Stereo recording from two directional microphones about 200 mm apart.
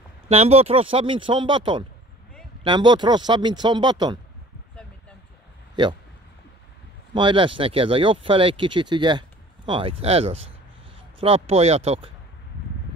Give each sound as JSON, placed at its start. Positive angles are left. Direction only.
{"t": 0.3, "sound": "speech", "side_deg": -30}
{"t": 7.2, "sound": "speech", "side_deg": -25}